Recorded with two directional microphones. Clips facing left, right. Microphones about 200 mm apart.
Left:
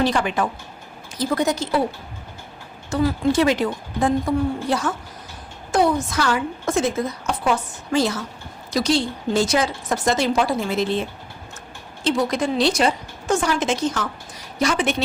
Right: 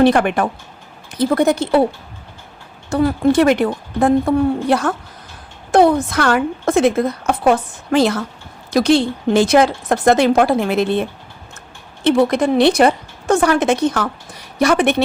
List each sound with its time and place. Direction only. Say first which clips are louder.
0.0 s a woman's voice: right 7 dB; 60° right (ahead or behind)
2.9 s a woman's voice: right 5 dB; 60° right (ahead or behind)